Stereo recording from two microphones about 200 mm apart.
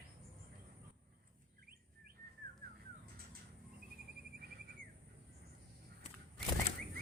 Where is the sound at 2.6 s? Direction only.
45° right (ahead or behind).